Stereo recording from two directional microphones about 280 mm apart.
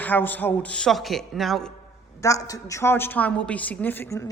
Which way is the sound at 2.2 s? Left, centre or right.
Centre.